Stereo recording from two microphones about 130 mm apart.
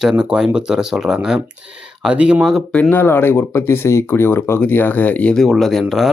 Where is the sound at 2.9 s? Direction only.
15° left (ahead or behind).